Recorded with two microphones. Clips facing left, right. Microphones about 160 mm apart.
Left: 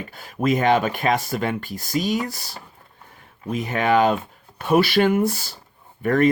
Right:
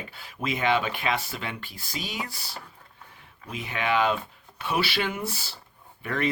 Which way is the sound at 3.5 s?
45° left (ahead or behind).